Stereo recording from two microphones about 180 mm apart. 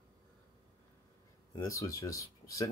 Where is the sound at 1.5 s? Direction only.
20° left (ahead or behind).